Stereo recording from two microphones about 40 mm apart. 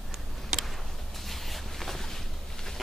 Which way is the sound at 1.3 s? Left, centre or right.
Centre.